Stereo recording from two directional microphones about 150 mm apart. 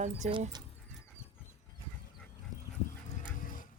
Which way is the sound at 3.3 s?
65° left (ahead or behind).